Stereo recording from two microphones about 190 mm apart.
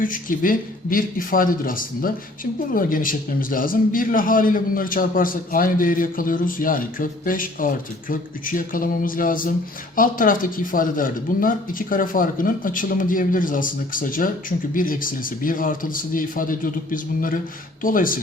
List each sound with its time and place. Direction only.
0.0 s speech: 45° left (ahead or behind)